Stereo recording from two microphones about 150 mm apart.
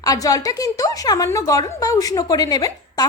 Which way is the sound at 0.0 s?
25° left (ahead or behind).